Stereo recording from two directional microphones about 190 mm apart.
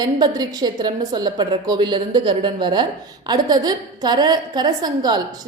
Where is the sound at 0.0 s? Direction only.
20° right (ahead or behind).